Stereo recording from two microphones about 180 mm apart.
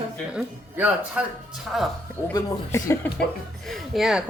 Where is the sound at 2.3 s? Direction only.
15° left (ahead or behind).